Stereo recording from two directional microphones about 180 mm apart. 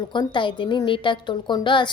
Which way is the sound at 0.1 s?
25° left (ahead or behind).